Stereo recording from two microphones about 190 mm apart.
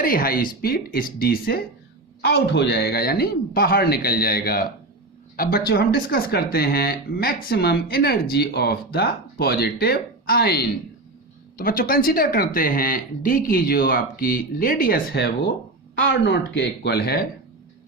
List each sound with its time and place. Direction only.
0.0 s speech: 50° left (ahead or behind)
16.0 s speech: 80° left; by 17.2 s 55° left (ahead or behind)